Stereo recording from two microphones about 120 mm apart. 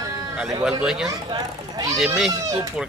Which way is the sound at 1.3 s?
35° right (ahead or behind).